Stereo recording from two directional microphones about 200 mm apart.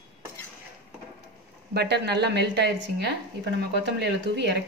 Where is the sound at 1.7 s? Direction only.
55° right (ahead or behind).